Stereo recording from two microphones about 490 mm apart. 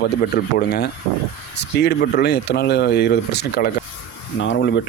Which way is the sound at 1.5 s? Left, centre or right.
Centre.